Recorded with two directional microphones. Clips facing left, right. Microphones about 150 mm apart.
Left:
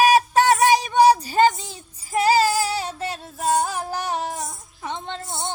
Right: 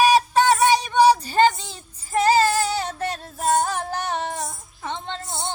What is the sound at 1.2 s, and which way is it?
Child singing, 10° left (ahead or behind).